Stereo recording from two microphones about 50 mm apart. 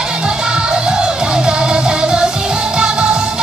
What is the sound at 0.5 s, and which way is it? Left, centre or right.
Music, centre.